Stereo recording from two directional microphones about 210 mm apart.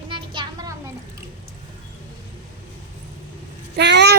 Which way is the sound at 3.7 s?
55° right (ahead or behind).